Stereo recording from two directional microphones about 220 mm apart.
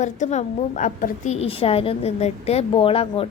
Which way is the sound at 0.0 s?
30° left (ahead or behind).